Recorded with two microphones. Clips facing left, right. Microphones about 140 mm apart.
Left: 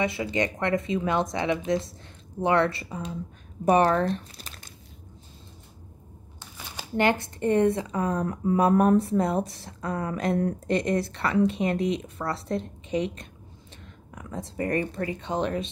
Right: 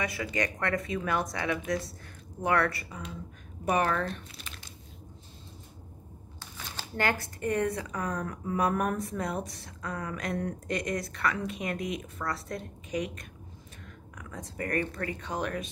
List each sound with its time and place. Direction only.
0.0 s speech: 25° left (ahead or behind); by 4.6 s 40° left (ahead or behind)
6.4 s speech: 20° left (ahead or behind)